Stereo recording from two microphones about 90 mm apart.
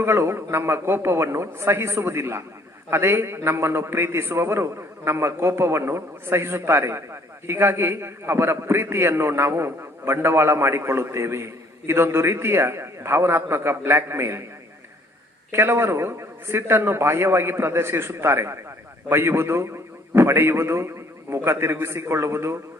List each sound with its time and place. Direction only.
0.0 s a man's voice: 30° right (ahead or behind)
15.5 s a man's voice: 25° right (ahead or behind)